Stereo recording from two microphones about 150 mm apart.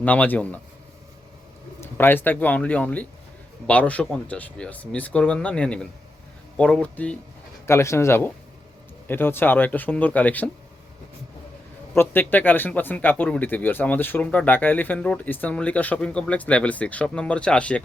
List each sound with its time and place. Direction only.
0.0 s speech: 10° left (ahead or behind)
1.8 s speech: 15° left (ahead or behind)
11.9 s speech: 15° left (ahead or behind)